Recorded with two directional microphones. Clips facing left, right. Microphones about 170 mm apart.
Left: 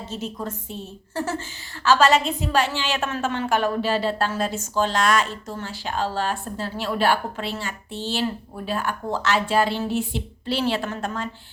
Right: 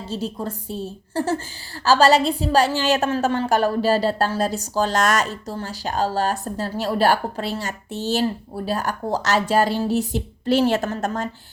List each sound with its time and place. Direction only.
0.1 s a woman's voice: 35° right (ahead or behind)